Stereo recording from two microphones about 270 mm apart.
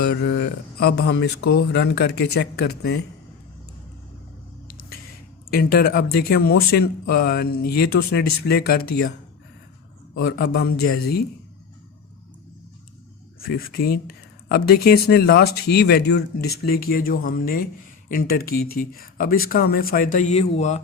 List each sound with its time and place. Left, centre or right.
0.0 s speech: left
5.5 s speech: left
10.2 s speech: left
13.4 s speech: left